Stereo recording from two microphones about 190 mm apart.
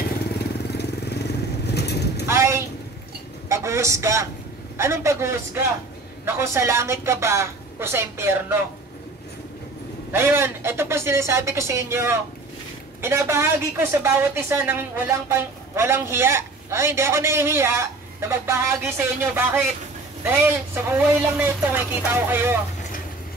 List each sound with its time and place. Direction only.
0.0 s vehicle: 55° left (ahead or behind)
2.2 s a sound: 15° right (ahead or behind)
3.4 s a woman's voice: 15° right (ahead or behind)
10.1 s a woman's voice: 10° right (ahead or behind)